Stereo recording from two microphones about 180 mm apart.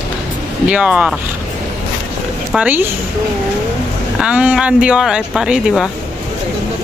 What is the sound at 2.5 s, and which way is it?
Speech, 10° right (ahead or behind).